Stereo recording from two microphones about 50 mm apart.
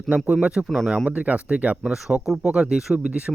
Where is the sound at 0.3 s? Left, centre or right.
Right.